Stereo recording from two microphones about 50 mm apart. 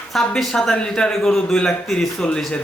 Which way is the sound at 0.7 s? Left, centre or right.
Centre.